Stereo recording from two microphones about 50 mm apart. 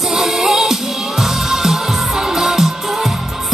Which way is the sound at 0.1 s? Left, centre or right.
Centre.